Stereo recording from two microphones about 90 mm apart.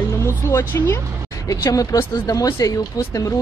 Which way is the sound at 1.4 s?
40° left (ahead or behind).